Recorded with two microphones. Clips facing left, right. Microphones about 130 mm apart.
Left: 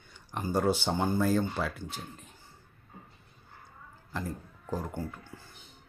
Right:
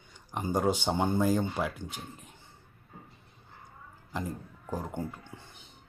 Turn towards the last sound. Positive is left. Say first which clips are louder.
# right 1 dB
turn(degrees=-25)  # may be behind; listen again after turning